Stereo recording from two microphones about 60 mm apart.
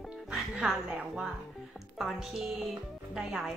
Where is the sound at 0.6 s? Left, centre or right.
Centre.